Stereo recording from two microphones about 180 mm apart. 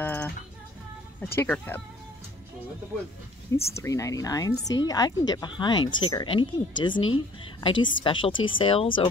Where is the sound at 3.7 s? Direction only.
15° left (ahead or behind).